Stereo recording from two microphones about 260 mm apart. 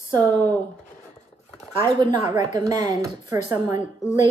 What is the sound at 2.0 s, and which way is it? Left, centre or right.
A woman's voice, centre.